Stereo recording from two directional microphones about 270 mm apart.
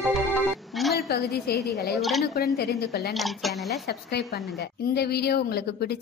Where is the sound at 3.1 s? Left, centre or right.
Centre.